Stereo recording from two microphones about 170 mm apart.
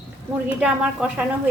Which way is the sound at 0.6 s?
5° right (ahead or behind).